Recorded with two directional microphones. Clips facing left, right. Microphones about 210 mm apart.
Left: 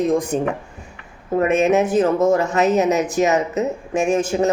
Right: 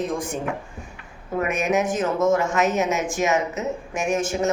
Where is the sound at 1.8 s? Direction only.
35° left (ahead or behind).